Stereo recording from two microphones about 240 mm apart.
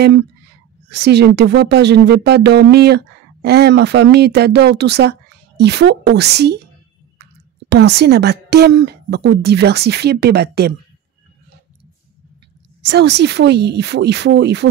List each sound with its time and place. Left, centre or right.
0.8 s speech: right
7.7 s speech: right
12.8 s speech: right